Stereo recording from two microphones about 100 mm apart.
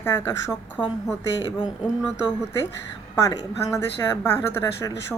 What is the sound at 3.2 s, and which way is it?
A woman's voice, 30° left (ahead or behind).